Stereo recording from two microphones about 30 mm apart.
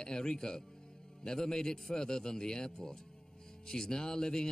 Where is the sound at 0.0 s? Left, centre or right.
Left.